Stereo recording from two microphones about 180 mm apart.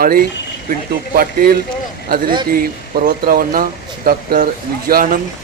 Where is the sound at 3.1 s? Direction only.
55° right (ahead or behind).